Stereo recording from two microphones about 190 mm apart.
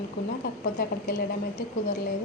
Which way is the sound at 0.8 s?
55° left (ahead or behind).